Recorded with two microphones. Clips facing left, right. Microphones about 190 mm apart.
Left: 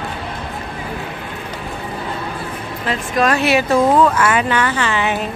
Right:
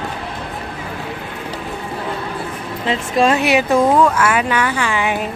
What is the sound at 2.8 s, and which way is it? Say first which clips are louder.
A woman's voice: right 2 dB; 25° right (ahead or behind).